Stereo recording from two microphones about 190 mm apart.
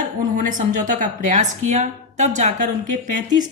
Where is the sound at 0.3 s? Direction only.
45° right (ahead or behind).